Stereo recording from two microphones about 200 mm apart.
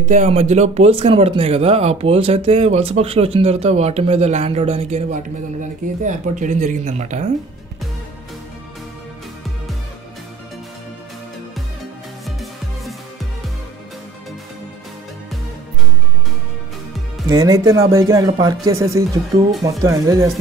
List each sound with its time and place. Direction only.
0.1 s speech: 35° right (ahead or behind)
17.3 s speech: 20° right (ahead or behind)